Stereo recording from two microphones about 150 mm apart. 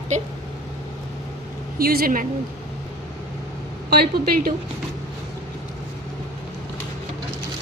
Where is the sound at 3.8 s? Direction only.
90° right.